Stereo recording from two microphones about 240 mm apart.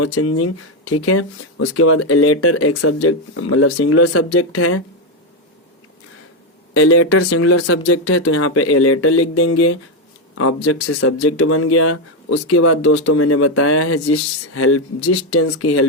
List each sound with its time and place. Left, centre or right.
0.0 s speech: left
6.7 s speech: left
8.2 s speech: left